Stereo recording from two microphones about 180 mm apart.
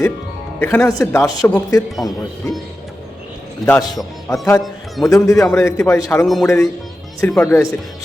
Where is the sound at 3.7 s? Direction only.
20° left (ahead or behind).